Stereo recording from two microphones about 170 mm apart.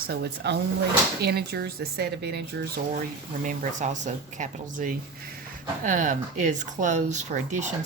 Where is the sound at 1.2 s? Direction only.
70° right (ahead or behind).